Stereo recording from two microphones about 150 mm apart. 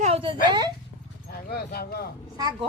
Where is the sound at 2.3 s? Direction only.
30° right (ahead or behind).